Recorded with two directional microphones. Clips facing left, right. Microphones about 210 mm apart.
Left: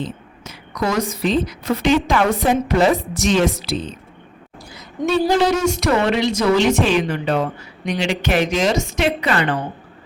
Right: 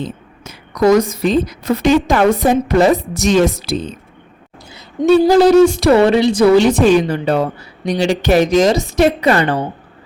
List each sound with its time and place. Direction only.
0.4 s a woman's voice: 45° right (ahead or behind)